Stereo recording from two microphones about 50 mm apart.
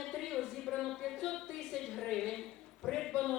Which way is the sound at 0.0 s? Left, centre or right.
Centre.